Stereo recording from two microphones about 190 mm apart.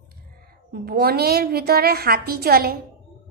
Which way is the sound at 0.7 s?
55° right (ahead or behind).